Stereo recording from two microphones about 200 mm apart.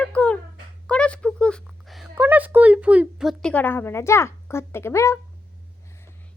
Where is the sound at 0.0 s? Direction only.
5° left (ahead or behind).